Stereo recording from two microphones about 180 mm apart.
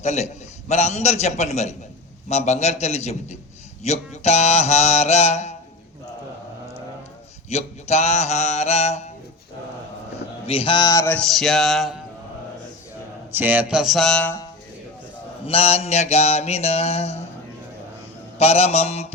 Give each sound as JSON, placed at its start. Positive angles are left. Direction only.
{"t": 0.0, "sound": "mantra", "side_deg": 40}
{"t": 7.5, "sound": "mantra", "side_deg": 35}
{"t": 10.4, "sound": "speech", "side_deg": 30}
{"t": 13.3, "sound": "a man's voice", "side_deg": -10}
{"t": 15.4, "sound": "mantra", "side_deg": 35}
{"t": 18.3, "sound": "mantra", "side_deg": 35}